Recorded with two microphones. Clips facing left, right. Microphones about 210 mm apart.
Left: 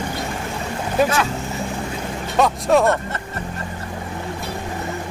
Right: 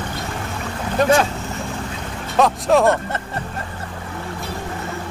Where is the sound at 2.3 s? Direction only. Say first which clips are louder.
Right 1 dB; centre (ahead or behind).